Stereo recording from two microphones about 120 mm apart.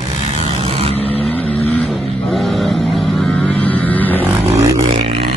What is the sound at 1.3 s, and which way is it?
Vehicle, 15° left (ahead or behind).